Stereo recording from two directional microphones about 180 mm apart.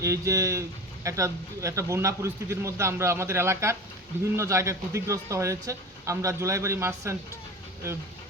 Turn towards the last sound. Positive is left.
turn(degrees=-15)  # may be behind; listen again after turning